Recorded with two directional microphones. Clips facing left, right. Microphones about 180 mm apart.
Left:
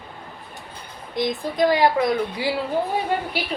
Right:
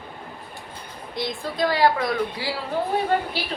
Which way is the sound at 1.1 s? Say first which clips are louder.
Left 5 dB; 15° left (ahead or behind).